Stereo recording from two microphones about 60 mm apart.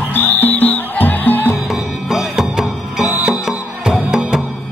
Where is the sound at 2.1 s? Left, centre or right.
Centre.